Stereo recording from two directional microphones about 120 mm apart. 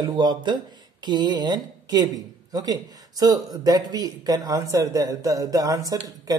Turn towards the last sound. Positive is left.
turn(degrees=-30)  # may be behind; listen again after turning